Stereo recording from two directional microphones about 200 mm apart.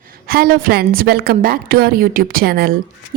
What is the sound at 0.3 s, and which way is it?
A woman's voice, 45° right (ahead or behind).